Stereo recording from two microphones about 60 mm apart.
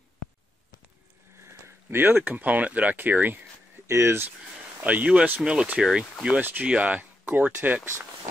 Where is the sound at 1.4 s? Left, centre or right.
Right.